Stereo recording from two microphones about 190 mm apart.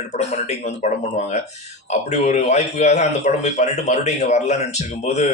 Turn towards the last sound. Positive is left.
turn(degrees=35)  # may be behind; listen again after turning